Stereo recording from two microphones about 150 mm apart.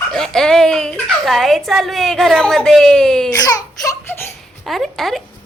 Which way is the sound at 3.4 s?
25° left (ahead or behind).